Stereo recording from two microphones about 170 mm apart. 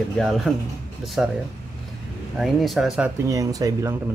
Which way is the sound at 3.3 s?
20° right (ahead or behind).